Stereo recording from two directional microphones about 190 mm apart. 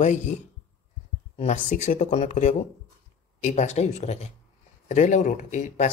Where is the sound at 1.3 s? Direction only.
35° left (ahead or behind).